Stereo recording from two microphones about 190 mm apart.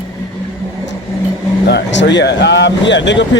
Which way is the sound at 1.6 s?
65° left (ahead or behind).